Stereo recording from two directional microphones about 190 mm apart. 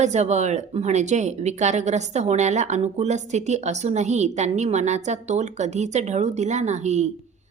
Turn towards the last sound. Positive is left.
turn(degrees=-35)  # may be behind; listen again after turning